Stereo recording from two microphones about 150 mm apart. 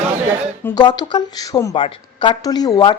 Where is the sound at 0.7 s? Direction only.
30° left (ahead or behind).